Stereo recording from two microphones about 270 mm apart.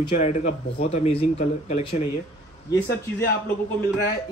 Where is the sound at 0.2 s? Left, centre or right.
Left.